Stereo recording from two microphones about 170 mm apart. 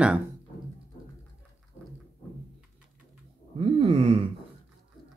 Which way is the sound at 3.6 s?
35° right (ahead or behind).